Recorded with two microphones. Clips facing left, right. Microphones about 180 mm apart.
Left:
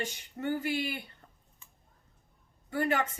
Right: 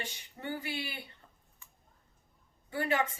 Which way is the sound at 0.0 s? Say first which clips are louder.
Left 7 dB; 45° left (ahead or behind).